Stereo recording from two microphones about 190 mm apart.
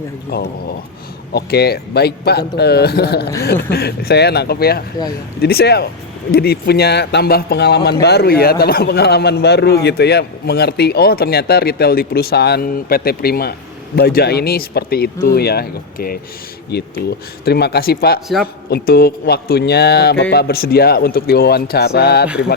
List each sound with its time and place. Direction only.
0.3 s a man's voice: 55° left (ahead or behind)